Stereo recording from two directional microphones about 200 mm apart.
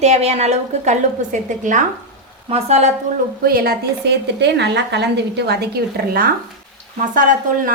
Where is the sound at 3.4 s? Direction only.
50° right (ahead or behind).